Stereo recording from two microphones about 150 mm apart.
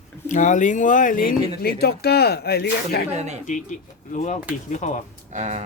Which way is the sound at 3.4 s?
55° left (ahead or behind).